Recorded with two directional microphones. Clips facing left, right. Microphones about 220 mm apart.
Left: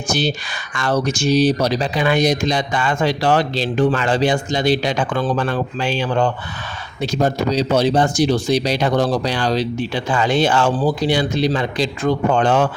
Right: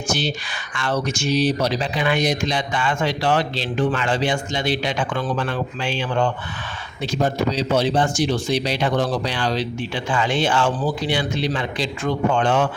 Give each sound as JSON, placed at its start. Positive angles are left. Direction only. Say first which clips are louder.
{"t": 0.1, "sound": "speech", "louder": "left 5 dB", "side_deg": 40}